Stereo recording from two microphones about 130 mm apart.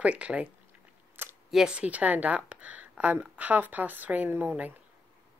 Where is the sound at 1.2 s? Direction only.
15° right (ahead or behind).